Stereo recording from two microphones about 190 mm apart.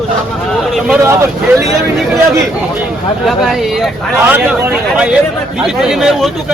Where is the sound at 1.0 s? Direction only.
15° right (ahead or behind).